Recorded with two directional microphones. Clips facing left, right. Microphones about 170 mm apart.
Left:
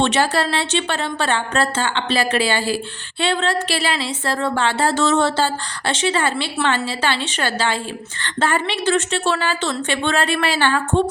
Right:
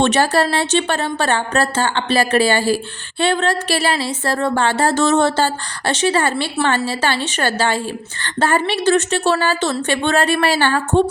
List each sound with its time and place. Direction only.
0.0 s a woman's voice: 45° right (ahead or behind)